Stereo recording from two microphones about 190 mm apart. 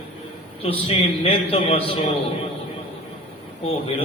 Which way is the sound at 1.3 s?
30° left (ahead or behind).